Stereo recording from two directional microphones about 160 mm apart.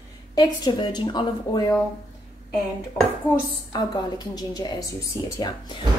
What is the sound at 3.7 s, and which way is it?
A woman's voice, 25° left (ahead or behind).